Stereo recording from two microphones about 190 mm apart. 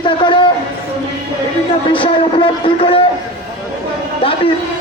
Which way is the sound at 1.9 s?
25° left (ahead or behind).